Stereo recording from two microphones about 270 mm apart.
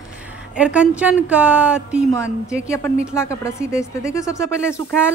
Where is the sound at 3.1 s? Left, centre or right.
Centre.